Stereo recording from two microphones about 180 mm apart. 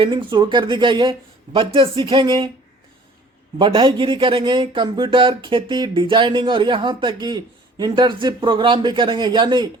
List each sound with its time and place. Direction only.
0.0 s speech: 25° right (ahead or behind)
3.6 s speech: 25° right (ahead or behind)